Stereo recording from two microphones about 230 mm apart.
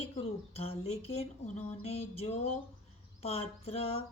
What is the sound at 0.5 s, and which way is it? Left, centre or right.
A woman's voice, left.